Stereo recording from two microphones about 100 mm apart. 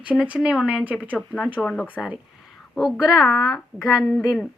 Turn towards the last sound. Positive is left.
turn(degrees=0)  # may be behind; listen again after turning